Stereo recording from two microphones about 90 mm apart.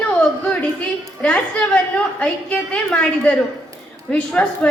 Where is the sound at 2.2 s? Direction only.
15° left (ahead or behind).